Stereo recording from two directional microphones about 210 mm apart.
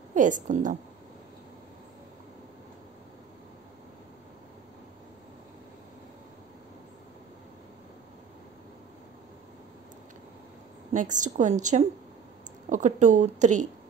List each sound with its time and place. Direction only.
0.1 s a woman's voice: 35° right (ahead or behind)
10.9 s a woman's voice: 35° right (ahead or behind)